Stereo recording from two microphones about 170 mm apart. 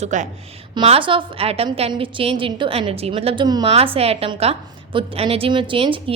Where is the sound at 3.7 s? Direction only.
35° right (ahead or behind).